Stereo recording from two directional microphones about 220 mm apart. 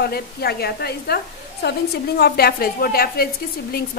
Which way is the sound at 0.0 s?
45° left (ahead or behind).